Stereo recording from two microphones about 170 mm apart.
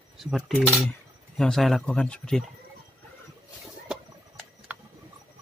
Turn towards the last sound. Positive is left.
turn(degrees=-5)  # may be behind; listen again after turning